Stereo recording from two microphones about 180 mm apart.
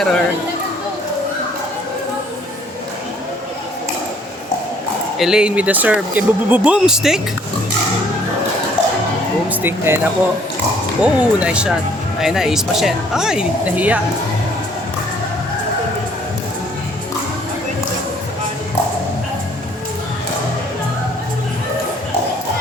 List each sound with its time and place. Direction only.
0.0 s speech: 5° left (ahead or behind)
5.1 s speech: centre (ahead or behind)
9.5 s speech: 10° right (ahead or behind)